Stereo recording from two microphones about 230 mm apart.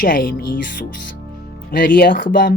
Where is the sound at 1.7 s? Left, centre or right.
Left.